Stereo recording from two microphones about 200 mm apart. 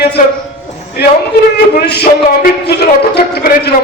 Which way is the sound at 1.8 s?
55° left (ahead or behind).